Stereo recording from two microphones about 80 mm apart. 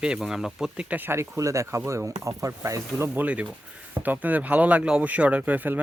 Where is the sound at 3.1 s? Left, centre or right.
Centre.